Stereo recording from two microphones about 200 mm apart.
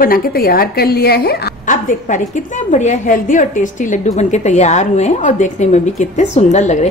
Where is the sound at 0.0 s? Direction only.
45° left (ahead or behind).